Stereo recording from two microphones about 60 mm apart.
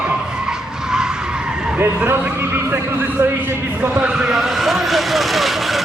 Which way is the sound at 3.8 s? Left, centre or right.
Right.